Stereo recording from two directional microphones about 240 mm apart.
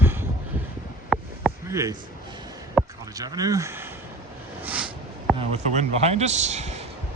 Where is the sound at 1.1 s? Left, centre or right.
Centre.